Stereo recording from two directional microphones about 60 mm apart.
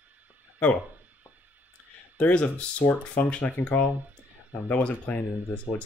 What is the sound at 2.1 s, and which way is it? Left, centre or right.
Speech, left.